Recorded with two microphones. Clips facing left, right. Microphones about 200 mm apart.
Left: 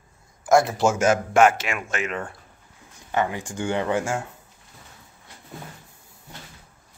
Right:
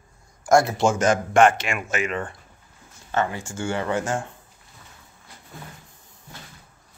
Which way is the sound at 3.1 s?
15° left (ahead or behind).